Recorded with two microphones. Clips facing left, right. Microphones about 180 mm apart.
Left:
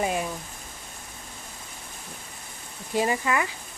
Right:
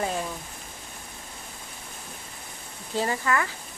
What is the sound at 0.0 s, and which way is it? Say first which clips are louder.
Rain: left 2 dB; 15° left (ahead or behind).